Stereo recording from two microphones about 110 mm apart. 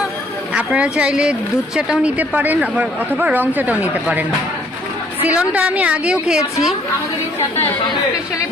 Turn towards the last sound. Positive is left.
turn(degrees=0)  # may be behind; listen again after turning